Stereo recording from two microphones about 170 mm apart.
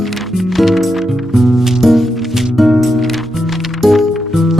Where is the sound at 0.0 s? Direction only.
Centre (ahead or behind).